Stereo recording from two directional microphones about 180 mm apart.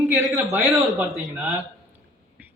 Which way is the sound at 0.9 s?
Centre (ahead or behind).